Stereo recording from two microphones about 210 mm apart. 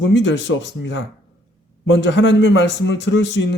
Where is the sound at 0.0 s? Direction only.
60° left (ahead or behind).